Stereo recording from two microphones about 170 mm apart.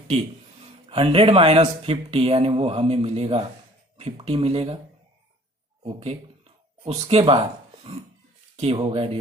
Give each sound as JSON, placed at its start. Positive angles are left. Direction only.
{"t": 0.6, "sound": "speech", "side_deg": -35}
{"t": 5.8, "sound": "speech", "side_deg": -35}
{"t": 8.5, "sound": "speech", "side_deg": -35}